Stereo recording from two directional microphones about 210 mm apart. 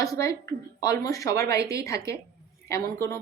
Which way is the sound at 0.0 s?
15° left (ahead or behind).